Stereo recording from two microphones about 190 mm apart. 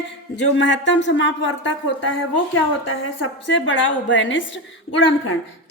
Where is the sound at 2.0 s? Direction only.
90° left.